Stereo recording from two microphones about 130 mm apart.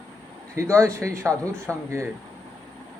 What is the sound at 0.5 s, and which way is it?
Speech, 20° right (ahead or behind).